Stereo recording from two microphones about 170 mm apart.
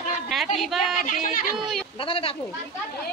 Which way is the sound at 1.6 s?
Centre (ahead or behind).